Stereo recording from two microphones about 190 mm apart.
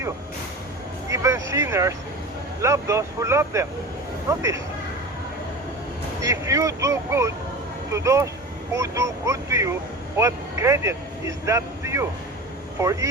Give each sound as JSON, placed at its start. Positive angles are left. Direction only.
{"t": 1.1, "sound": "speech", "side_deg": -15}
{"t": 6.2, "sound": "speech", "side_deg": -15}